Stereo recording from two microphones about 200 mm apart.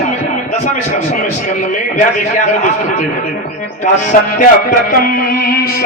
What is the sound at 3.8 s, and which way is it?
Music, 40° left (ahead or behind).